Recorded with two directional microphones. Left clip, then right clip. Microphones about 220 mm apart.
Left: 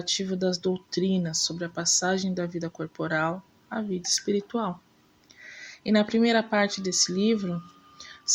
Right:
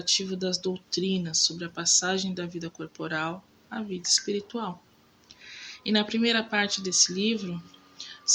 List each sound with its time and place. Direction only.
0.0 s speech: 25° left (ahead or behind)
7.9 s whispering: 25° left (ahead or behind)